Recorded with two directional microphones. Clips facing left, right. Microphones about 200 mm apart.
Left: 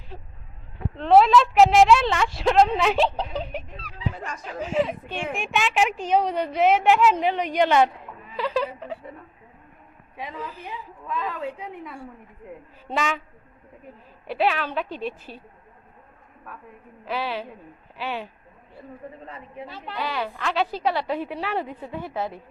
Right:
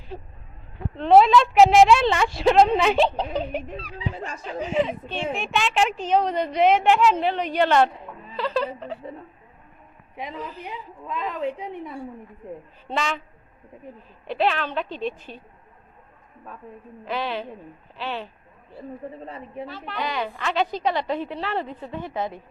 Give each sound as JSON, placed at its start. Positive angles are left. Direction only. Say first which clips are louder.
{"t": 0.9, "sound": "a woman's voice", "louder": "right 1 dB", "side_deg": 0}
{"t": 4.1, "sound": "a woman's voice", "louder": "right 1 dB", "side_deg": -30}
{"t": 4.4, "sound": "a woman's voice", "louder": "right 1 dB", "side_deg": 0}
{"t": 10.6, "sound": "a woman's voice", "louder": "right 1 dB", "side_deg": -15}
{"t": 12.9, "sound": "a woman's voice", "louder": "left 1 dB", "side_deg": 10}
{"t": 14.3, "sound": "a woman's voice", "louder": "even", "side_deg": 10}
{"t": 17.1, "sound": "a woman's voice", "louder": "right 1 dB", "side_deg": 5}
{"t": 19.2, "sound": "a man's voice", "louder": "right 4 dB", "side_deg": -30}
{"t": 20.0, "sound": "a woman's voice", "louder": "right 1 dB", "side_deg": 5}